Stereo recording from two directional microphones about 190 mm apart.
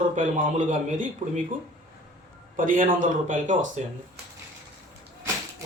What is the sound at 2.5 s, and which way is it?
A man's voice, 45° right (ahead or behind).